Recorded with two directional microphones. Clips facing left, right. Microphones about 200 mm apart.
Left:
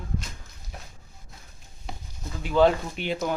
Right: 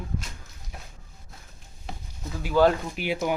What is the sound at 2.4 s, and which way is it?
Speech, centre (ahead or behind).